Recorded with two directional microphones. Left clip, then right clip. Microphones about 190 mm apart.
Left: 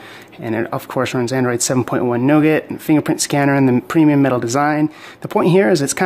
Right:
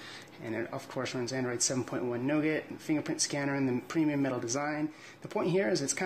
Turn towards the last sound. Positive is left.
turn(degrees=40)  # may be behind; listen again after turning